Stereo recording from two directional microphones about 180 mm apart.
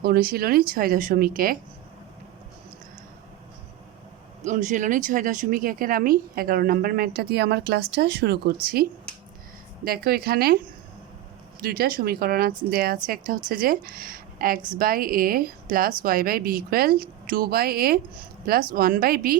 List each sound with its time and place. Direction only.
0.0 s speech: 55° right (ahead or behind)
4.4 s speech: 45° right (ahead or behind)
11.6 s speech: 55° right (ahead or behind)